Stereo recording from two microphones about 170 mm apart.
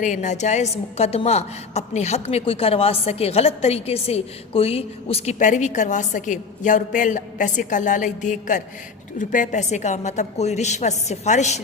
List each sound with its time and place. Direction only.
0.0 s a woman's voice: 45° left (ahead or behind)